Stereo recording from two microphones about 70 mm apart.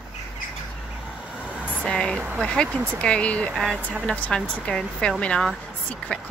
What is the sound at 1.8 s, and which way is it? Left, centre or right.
Speech, centre.